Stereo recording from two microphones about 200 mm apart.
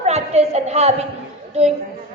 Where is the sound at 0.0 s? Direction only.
30° right (ahead or behind).